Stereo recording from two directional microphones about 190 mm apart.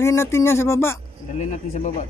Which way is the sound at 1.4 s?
40° left (ahead or behind).